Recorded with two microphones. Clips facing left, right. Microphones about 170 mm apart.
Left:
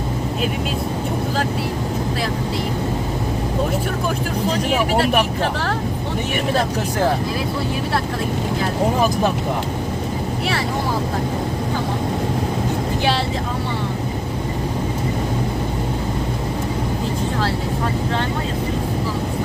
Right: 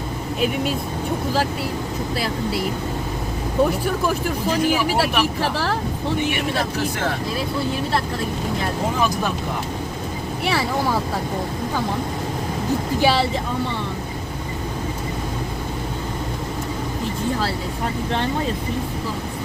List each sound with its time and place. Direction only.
4.9 s speech: 55° left (ahead or behind)